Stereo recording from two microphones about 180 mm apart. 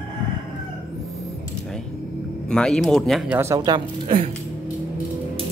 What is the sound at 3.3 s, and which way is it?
Speech, 15° right (ahead or behind).